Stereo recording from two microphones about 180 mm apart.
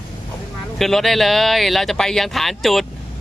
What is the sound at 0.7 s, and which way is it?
Speech, centre (ahead or behind).